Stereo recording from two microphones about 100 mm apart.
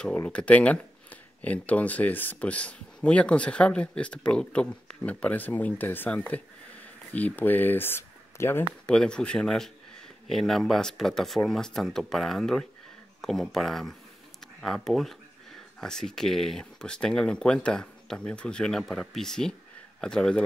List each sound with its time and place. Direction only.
0.1 s speech: 15° left (ahead or behind)
8.8 s speech: 10° left (ahead or behind)